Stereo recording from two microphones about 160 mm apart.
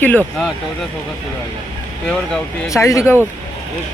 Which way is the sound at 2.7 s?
20° left (ahead or behind).